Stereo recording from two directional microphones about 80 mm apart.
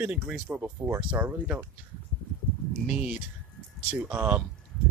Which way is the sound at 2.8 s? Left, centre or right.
Centre.